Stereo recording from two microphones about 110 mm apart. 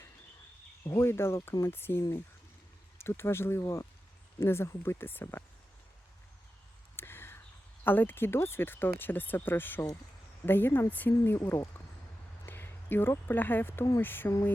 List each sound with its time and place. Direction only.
0.9 s speech: 25° left (ahead or behind)
6.9 s a sound: 20° left (ahead or behind)
7.9 s speech: 20° left (ahead or behind)